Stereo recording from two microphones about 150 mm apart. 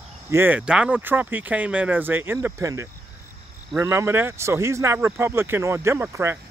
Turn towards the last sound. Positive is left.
turn(degrees=-15)  # may be behind; listen again after turning